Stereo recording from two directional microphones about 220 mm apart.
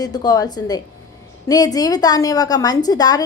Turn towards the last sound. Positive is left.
turn(degrees=15)  # may be behind; listen again after turning